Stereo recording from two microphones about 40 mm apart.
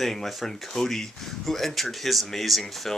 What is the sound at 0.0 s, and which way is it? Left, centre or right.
Speech, centre.